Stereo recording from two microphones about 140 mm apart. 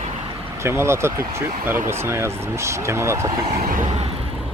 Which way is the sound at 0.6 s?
20° right (ahead or behind).